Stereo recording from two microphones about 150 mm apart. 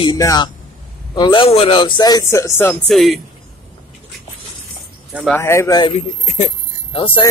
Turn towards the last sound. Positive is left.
turn(degrees=35)  # may be behind; listen again after turning